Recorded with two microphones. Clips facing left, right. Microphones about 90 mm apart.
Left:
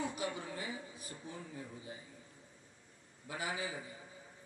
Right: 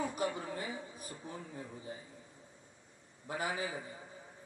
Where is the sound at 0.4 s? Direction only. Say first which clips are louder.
Right 2 dB; 40° right (ahead or behind).